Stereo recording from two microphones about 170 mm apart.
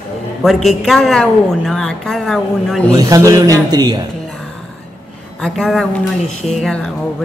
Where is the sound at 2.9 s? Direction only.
20° right (ahead or behind).